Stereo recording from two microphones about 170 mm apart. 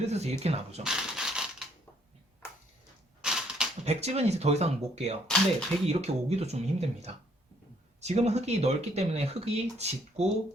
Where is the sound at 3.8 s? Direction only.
40° right (ahead or behind).